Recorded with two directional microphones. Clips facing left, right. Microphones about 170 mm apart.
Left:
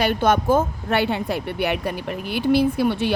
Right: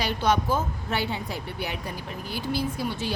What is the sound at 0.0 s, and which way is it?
A woman's voice, 55° left (ahead or behind).